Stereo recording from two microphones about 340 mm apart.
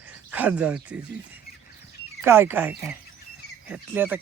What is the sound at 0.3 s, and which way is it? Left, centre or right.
Speech, centre.